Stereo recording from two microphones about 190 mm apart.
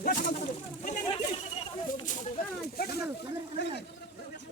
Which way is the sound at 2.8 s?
55° left (ahead or behind).